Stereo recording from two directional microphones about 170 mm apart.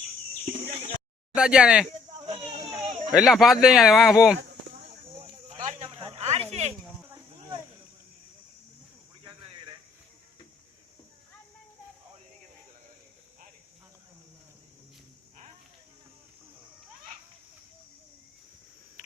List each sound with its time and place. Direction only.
1.4 s speech: 5° right (ahead or behind)
3.1 s speech: centre (ahead or behind)
5.2 s a sound: 45° right (ahead or behind)
6.5 s speech: 40° right (ahead or behind)